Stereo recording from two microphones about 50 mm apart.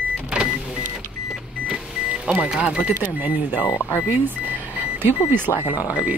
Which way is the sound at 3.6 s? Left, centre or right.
Left.